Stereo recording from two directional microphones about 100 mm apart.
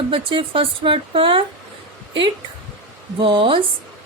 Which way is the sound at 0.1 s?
60° right (ahead or behind).